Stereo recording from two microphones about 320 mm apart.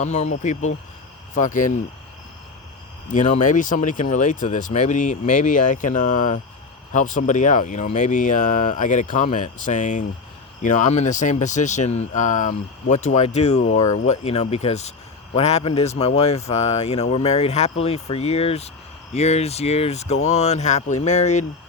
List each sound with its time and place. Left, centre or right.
0.0 s speech: left
3.1 s speech: left